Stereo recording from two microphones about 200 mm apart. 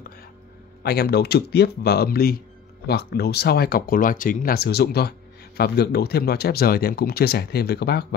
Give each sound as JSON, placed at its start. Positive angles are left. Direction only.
{"t": 0.8, "sound": "speech", "side_deg": 50}